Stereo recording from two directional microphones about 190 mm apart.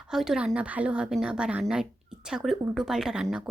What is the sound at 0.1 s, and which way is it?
A woman's voice, centre (ahead or behind).